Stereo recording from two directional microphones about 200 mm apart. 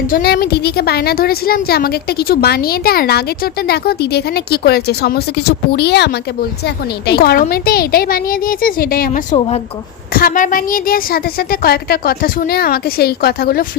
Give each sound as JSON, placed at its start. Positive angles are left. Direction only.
{"t": 0.1, "sound": "a woman's voice", "side_deg": 50}